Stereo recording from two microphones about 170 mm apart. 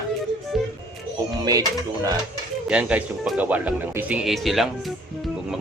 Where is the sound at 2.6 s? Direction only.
5° right (ahead or behind).